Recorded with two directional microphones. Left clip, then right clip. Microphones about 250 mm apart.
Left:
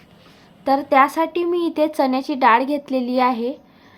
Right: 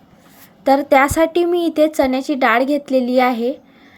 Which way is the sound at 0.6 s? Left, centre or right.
Centre.